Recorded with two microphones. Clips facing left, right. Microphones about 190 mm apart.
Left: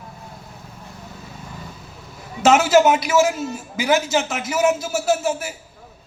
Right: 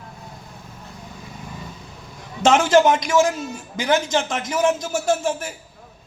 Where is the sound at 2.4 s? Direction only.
5° left (ahead or behind).